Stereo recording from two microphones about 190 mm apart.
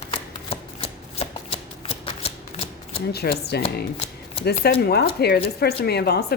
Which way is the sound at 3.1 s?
55° left (ahead or behind).